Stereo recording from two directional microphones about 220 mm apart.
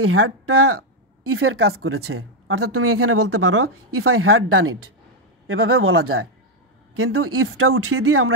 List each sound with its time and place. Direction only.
0.1 s speech: 75° right (ahead or behind)